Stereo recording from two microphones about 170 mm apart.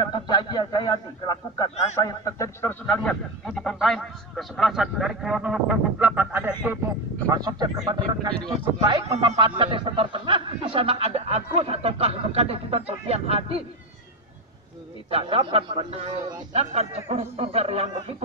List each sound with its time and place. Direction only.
0.0 s a man's voice: 25° left (ahead or behind); by 13.6 s 35° right (ahead or behind)
15.0 s a man's voice: 35° right (ahead or behind)